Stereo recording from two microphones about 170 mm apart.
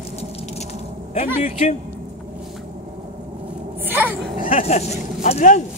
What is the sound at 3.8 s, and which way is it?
Speech, 10° right (ahead or behind).